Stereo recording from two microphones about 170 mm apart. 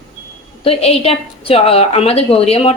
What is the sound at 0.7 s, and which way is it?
A woman's voice, 35° left (ahead or behind).